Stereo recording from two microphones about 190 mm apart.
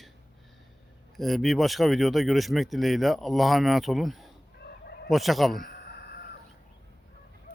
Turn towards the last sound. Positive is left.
turn(degrees=55)  # may be behind; listen again after turning